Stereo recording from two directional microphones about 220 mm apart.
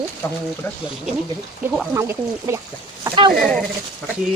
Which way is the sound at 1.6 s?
Centre (ahead or behind).